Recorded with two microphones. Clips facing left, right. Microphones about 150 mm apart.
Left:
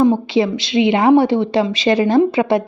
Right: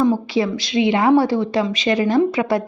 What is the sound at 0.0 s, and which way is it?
A woman's voice, 25° left (ahead or behind).